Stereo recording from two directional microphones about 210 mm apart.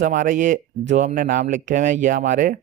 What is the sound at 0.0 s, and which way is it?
Speech, 40° right (ahead or behind).